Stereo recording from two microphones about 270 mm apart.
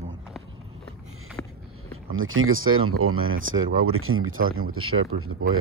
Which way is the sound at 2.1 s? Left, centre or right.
Right.